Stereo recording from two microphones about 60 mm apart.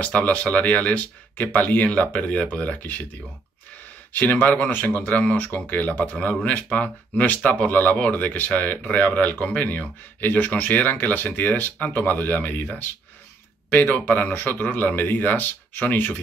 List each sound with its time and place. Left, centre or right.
0.0 s speech: left
4.1 s speech: left
13.7 s a man's voice: left